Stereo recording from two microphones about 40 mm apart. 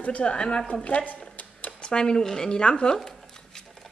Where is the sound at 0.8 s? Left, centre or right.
Left.